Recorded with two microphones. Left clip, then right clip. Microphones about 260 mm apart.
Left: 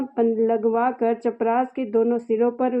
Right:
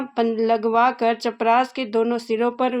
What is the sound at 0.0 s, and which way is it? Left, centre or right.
Speech, right.